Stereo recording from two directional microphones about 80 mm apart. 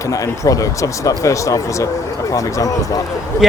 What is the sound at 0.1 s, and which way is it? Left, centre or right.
Speech, left.